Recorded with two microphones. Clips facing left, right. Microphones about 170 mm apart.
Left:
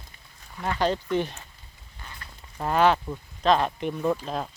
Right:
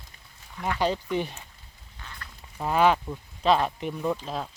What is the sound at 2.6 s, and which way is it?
Speech, 10° right (ahead or behind).